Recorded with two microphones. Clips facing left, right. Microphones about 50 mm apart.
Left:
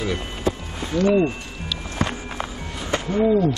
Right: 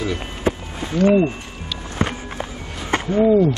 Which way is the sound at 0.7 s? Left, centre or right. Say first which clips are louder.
Right 3 dB; right.